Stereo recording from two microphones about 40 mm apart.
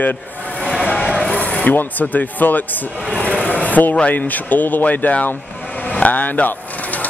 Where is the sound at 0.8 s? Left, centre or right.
Left.